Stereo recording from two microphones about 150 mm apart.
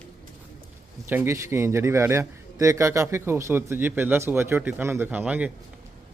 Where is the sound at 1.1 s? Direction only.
15° right (ahead or behind).